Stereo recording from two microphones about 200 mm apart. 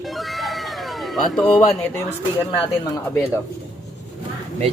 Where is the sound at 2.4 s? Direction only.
20° left (ahead or behind).